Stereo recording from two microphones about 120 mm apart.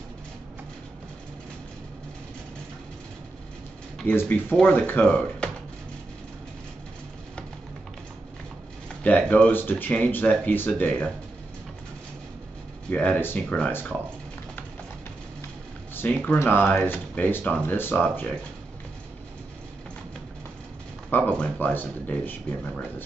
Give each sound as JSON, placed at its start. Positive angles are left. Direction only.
{"t": 4.0, "sound": "speech", "side_deg": 15}
{"t": 9.0, "sound": "speech", "side_deg": 10}
{"t": 12.9, "sound": "speech", "side_deg": 15}
{"t": 15.9, "sound": "speech", "side_deg": 15}
{"t": 21.1, "sound": "speech", "side_deg": 15}